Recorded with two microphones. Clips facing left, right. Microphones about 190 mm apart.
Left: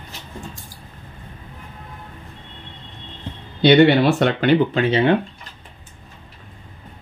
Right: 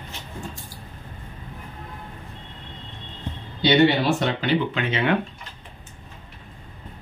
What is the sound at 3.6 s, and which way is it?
Speech, 60° left (ahead or behind).